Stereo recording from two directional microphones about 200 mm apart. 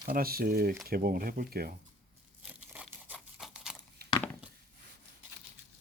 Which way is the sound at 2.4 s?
5° right (ahead or behind).